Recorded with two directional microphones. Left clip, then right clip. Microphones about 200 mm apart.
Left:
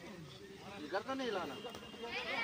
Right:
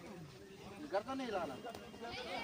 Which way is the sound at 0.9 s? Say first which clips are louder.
Left 1 dB; 25° right (ahead or behind).